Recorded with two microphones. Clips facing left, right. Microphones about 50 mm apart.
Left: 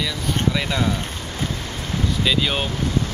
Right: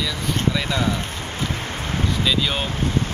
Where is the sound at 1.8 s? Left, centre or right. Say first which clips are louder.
Left 1 dB; right.